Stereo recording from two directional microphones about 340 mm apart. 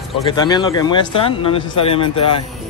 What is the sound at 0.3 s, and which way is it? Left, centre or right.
Speech, centre.